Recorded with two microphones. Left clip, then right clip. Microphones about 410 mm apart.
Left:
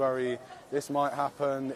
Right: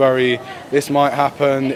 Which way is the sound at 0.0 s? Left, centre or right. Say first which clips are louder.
Right 14 dB; left.